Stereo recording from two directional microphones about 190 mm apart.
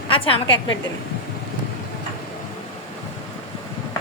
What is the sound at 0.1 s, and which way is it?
Speech, 25° left (ahead or behind).